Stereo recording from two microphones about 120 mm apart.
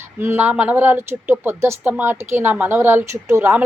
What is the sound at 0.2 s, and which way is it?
A woman's voice, 15° right (ahead or behind).